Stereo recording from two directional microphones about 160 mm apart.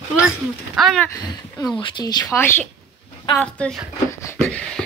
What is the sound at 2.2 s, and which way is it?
A woman's voice, 15° left (ahead or behind).